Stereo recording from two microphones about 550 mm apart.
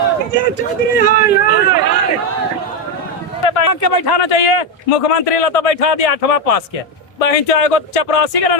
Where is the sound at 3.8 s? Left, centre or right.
Left.